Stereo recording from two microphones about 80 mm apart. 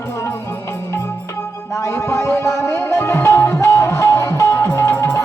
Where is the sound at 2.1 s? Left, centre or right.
Left.